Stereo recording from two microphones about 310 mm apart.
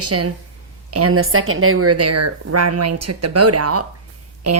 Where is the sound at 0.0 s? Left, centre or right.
Right.